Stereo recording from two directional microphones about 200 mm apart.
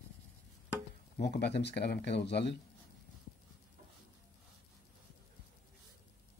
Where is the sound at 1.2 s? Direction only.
55° left (ahead or behind).